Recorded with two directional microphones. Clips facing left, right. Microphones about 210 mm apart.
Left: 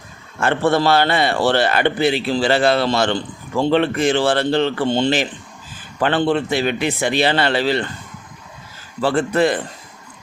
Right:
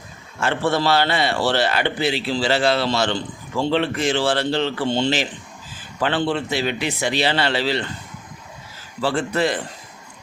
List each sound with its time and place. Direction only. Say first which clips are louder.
0.3 s a man's voice: left 4 dB; 55° left (ahead or behind)
9.0 s a man's voice: left 4 dB; 55° left (ahead or behind)